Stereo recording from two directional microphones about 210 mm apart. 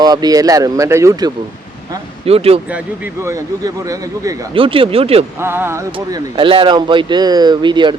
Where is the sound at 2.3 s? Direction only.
30° right (ahead or behind).